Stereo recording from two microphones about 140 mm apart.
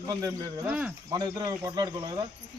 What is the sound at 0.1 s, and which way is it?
Speech, 25° right (ahead or behind).